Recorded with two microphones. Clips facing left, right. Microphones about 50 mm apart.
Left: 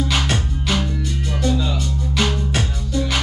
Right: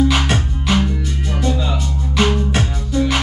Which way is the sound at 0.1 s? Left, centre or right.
Centre.